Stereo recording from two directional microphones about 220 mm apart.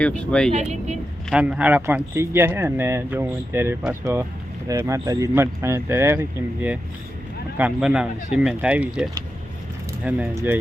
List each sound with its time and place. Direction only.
0.0 s speech: 5° left (ahead or behind)
0.5 s speech: 30° right (ahead or behind)
1.3 s speech: 5° right (ahead or behind)